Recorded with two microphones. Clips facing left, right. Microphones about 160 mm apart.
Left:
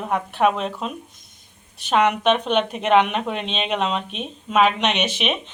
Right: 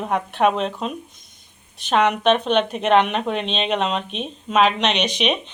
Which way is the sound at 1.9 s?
10° left (ahead or behind).